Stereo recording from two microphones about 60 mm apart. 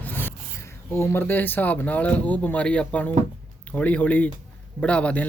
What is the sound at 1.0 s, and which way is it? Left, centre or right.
A man's voice, left.